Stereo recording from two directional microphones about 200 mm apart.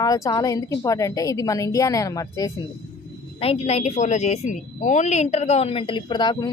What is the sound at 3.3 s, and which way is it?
A woman's voice, 30° left (ahead or behind).